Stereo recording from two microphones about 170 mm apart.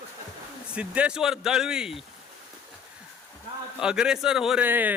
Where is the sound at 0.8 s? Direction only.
5° right (ahead or behind).